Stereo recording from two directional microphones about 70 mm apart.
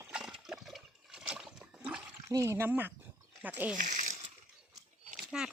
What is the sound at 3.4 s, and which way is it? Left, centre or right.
Speech, right.